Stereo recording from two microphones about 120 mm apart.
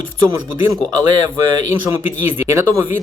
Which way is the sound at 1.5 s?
25° right (ahead or behind).